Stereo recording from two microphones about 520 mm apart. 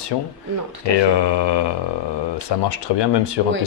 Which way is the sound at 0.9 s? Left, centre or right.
Left.